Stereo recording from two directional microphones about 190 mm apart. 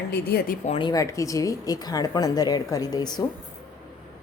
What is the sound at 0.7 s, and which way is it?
Speech, 25° left (ahead or behind).